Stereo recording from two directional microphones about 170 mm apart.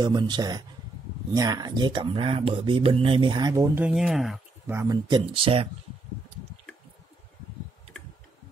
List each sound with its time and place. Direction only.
0.0 s speech: 25° right (ahead or behind)
3.8 s speech: centre (ahead or behind)
4.6 s speech: 20° right (ahead or behind)